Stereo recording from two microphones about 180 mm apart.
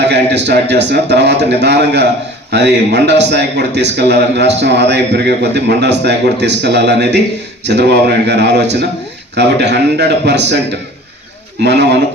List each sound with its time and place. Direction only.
0.0 s a man's voice: 70° right (ahead or behind)
11.6 s a man's voice: 70° right (ahead or behind)